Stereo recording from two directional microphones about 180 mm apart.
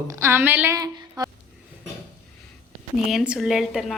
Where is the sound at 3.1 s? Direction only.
5° right (ahead or behind).